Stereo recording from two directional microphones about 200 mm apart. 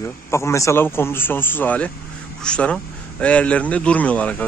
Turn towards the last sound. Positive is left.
turn(degrees=5)  # may be behind; listen again after turning